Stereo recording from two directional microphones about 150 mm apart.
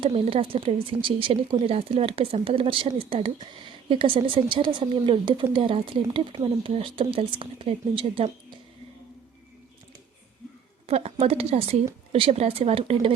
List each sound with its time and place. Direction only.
0.0 s speech: 40° right (ahead or behind)
10.8 s speech: 40° right (ahead or behind)